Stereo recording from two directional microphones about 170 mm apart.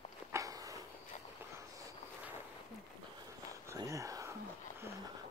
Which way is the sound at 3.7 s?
20° right (ahead or behind).